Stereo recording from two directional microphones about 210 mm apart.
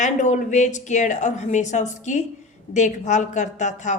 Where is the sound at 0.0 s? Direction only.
35° left (ahead or behind).